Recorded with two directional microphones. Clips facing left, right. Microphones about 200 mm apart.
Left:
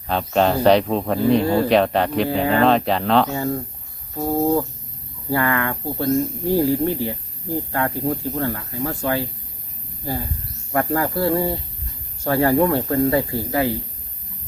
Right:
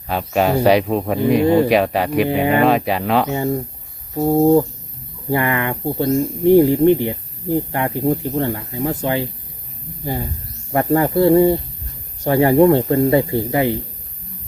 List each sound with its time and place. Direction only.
0.1 s speech: 10° right (ahead or behind)
3.3 s speech: 20° right (ahead or behind)
10.7 s speech: 25° right (ahead or behind)